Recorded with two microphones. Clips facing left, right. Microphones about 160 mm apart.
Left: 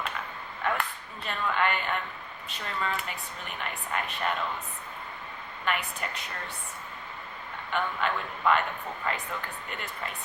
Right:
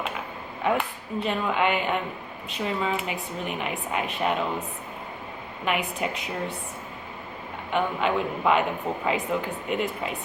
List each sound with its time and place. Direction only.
0.6 s a woman's voice: 5° right (ahead or behind)
5.6 s speech: 5° right (ahead or behind)
7.7 s speech: 5° right (ahead or behind)